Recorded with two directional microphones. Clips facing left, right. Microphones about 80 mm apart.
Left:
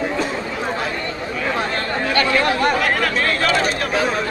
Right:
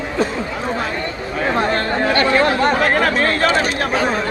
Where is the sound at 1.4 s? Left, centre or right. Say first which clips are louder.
Right 5 dB; right.